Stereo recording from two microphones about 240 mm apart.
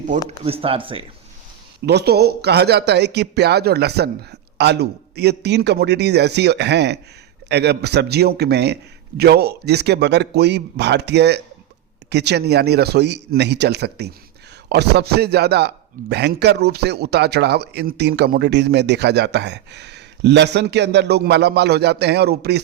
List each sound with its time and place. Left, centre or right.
0.3 s speech: right
1.9 s a man's voice: right